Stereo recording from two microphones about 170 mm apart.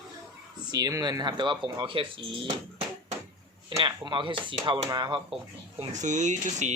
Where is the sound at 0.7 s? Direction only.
20° right (ahead or behind).